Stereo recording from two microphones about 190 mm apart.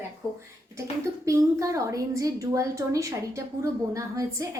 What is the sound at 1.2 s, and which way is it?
A woman's voice, 15° right (ahead or behind).